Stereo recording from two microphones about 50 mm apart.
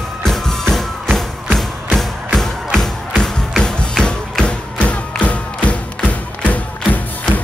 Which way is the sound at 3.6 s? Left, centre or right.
Centre.